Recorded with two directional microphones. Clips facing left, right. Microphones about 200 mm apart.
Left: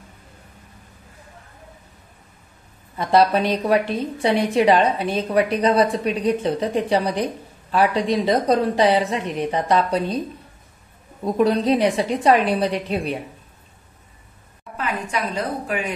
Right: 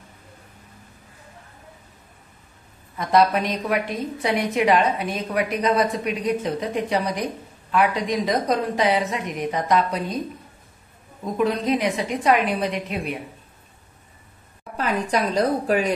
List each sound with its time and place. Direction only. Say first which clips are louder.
3.0 s a woman's voice: left 2 dB; 30° left (ahead or behind)
11.3 s a woman's voice: left 4 dB; 35° left (ahead or behind)
14.8 s a woman's voice: right 3 dB; 35° right (ahead or behind)